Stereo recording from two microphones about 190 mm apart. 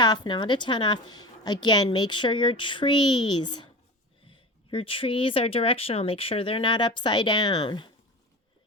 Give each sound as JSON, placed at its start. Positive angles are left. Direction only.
{"t": 0.0, "sound": "a woman's voice", "side_deg": 25}